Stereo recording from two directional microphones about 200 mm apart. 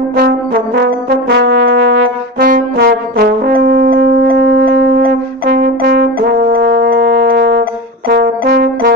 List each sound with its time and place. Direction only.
0.7 s brass instrument: 55° right (ahead or behind)